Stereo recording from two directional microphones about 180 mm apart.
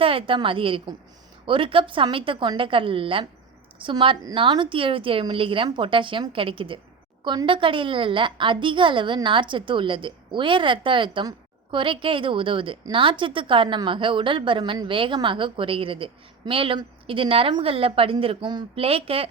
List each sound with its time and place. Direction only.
0.0 s a woman's voice: 30° right (ahead or behind)